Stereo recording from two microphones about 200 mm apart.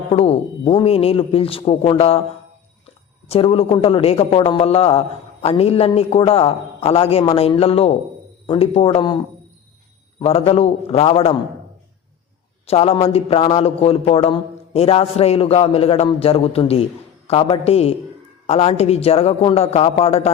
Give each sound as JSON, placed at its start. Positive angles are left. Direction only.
{"t": 0.1, "sound": "speech", "side_deg": 30}
{"t": 3.2, "sound": "a man's voice", "side_deg": 30}
{"t": 10.2, "sound": "a man's voice", "side_deg": 30}
{"t": 12.6, "sound": "a man's voice", "side_deg": 30}